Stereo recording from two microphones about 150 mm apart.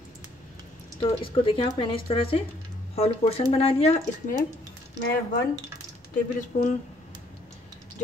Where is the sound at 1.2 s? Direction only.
35° left (ahead or behind).